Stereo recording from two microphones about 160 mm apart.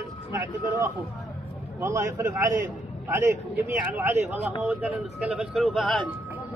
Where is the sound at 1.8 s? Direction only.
15° right (ahead or behind); by 6.1 s centre (ahead or behind).